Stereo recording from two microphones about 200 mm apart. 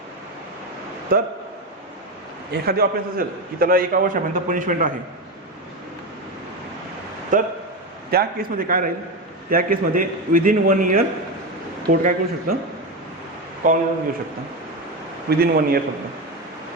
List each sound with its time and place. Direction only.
1.1 s a man's voice: 45° right (ahead or behind)
2.5 s a man's voice: 50° right (ahead or behind)
7.3 s a man's voice: 40° right (ahead or behind)
13.6 s a man's voice: 40° right (ahead or behind)
15.3 s a man's voice: 50° right (ahead or behind)